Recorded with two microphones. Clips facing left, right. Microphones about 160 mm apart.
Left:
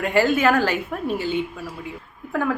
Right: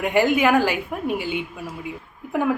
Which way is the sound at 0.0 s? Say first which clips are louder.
Even; 15° right (ahead or behind).